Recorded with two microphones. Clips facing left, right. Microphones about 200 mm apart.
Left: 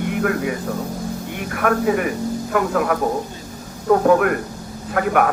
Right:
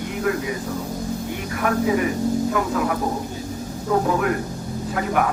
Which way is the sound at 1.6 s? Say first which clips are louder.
Left 2 dB; 60° left (ahead or behind).